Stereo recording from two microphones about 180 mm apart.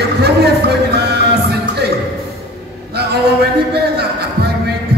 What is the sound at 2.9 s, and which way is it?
Music, 65° right (ahead or behind).